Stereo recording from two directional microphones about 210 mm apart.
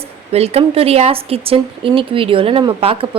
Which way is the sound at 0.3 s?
30° right (ahead or behind).